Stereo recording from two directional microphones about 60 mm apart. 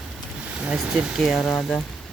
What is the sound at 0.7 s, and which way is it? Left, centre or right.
Speech, centre.